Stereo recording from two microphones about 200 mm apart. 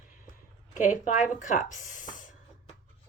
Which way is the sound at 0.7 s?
40° left (ahead or behind).